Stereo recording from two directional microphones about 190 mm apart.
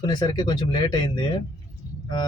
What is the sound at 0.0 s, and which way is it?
Speech, 20° left (ahead or behind).